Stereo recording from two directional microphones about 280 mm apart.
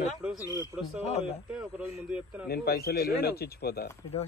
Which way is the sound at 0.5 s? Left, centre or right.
Centre.